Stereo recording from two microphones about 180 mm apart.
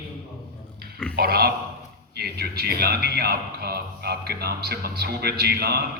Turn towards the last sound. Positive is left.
turn(degrees=-60)  # may be behind; listen again after turning